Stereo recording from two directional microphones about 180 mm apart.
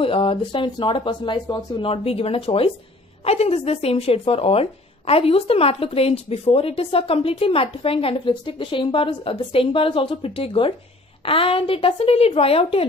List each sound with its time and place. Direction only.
0.0 s a woman's voice: 30° left (ahead or behind)